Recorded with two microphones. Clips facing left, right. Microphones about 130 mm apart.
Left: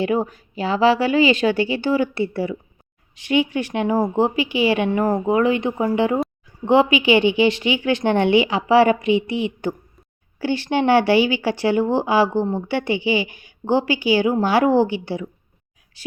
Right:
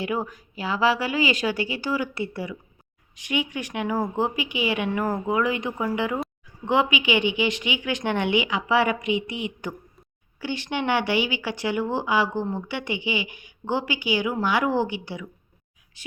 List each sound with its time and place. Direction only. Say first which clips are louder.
0.0 s a woman's voice: left 7 dB; 30° left (ahead or behind)